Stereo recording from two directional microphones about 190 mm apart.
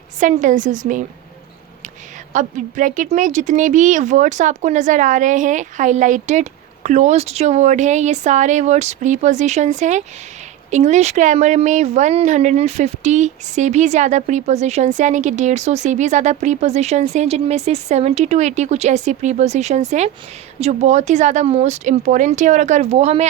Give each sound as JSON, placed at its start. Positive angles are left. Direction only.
{"t": 0.2, "sound": "a woman's voice", "side_deg": -45}
{"t": 2.3, "sound": "a woman's voice", "side_deg": -40}